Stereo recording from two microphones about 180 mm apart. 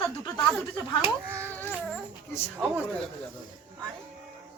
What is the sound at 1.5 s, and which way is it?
Babbling, 10° left (ahead or behind).